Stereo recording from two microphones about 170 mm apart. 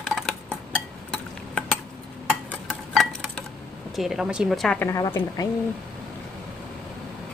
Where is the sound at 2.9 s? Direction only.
Centre (ahead or behind).